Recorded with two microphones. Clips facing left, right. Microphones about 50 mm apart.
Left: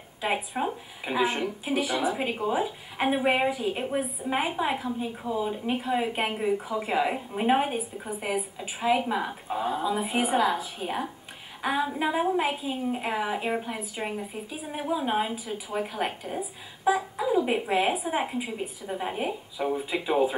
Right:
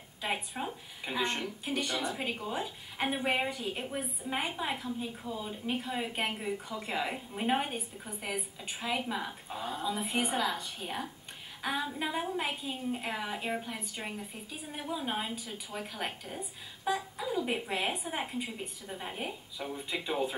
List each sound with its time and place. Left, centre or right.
0.2 s a woman's voice: centre
18.9 s speech: centre